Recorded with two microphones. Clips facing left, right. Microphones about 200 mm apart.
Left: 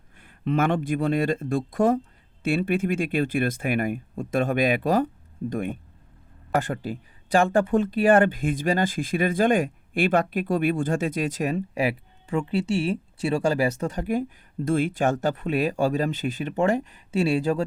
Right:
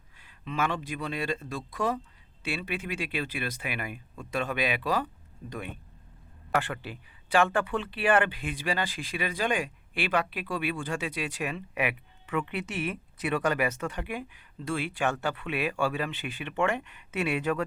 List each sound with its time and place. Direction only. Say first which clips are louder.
0.2 s speech: left 8 dB; 55° left (ahead or behind); by 17.6 s 35° left (ahead or behind)